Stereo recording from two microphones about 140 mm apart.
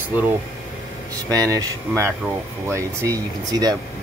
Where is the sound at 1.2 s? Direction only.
25° right (ahead or behind).